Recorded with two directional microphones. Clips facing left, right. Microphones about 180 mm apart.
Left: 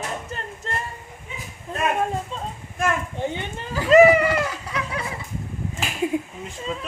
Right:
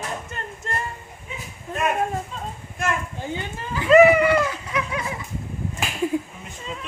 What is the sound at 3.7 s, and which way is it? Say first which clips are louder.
Speech: even; 40° left (ahead or behind).